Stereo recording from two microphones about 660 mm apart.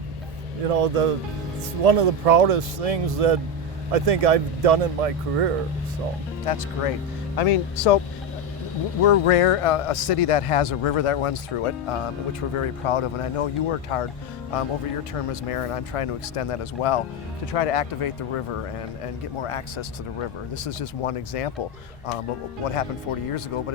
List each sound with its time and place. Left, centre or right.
0.7 s speech: right
6.4 s speech: left
7.3 s speech: left
9.0 s speech: left
15.3 s speech: left
19.4 s speech: left
22.6 s speech: left